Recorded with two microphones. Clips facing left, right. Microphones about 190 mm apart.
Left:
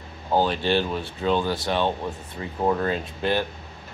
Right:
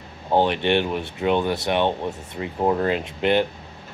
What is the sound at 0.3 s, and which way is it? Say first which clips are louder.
Speech: right 2 dB; 20° right (ahead or behind).